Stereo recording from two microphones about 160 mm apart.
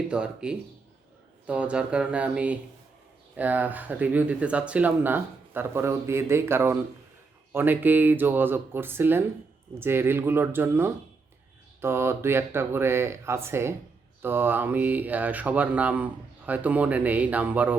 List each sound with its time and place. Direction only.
0.1 s speech: 5° right (ahead or behind)